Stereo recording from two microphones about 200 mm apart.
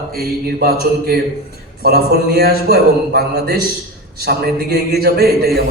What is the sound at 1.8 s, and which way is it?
A man's voice, 50° right (ahead or behind).